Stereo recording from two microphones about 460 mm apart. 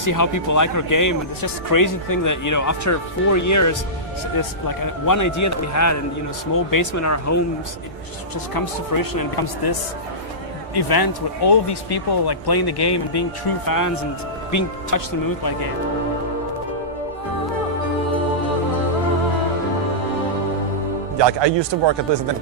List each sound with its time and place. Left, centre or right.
0.0 s speech: left
8.5 s speech: left
10.8 s speech: left
13.7 s speech: left
21.2 s a man's voice: right